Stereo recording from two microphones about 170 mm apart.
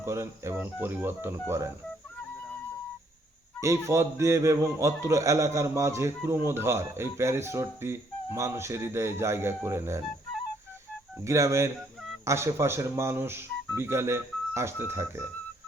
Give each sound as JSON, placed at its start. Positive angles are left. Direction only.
{"t": 0.0, "sound": "speech", "side_deg": -15}
{"t": 3.6, "sound": "speech", "side_deg": -15}
{"t": 11.2, "sound": "speech", "side_deg": -15}